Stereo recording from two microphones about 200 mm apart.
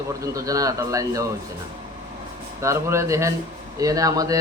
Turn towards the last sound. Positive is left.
turn(degrees=-15)  # may be behind; listen again after turning